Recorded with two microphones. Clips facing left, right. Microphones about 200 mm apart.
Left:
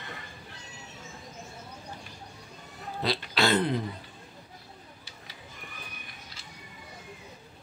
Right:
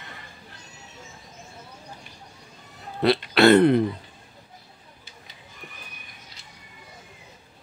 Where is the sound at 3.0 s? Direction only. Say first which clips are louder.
Right 11 dB; 60° right (ahead or behind).